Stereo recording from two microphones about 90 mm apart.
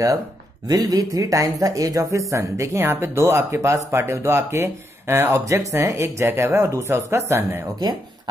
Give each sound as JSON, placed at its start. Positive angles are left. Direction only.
{"t": 0.7, "sound": "speech", "side_deg": -45}